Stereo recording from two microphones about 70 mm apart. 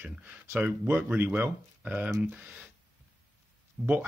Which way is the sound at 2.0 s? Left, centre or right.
Right.